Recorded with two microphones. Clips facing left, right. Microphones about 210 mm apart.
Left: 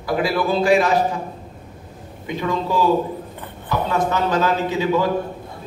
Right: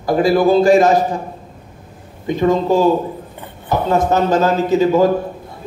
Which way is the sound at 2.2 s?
45° right (ahead or behind).